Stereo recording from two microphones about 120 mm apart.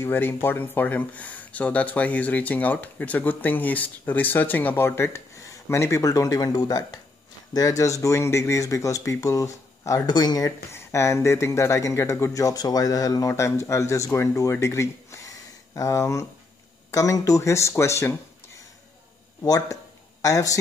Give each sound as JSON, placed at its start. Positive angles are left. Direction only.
{"t": 0.0, "sound": "speech", "side_deg": 20}
{"t": 19.4, "sound": "speech", "side_deg": 30}